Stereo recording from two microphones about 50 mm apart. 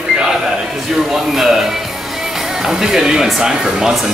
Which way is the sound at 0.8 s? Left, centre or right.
Centre.